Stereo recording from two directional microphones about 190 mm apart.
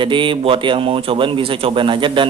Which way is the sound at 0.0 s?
25° right (ahead or behind).